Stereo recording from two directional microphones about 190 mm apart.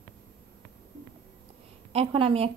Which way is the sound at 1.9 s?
30° right (ahead or behind).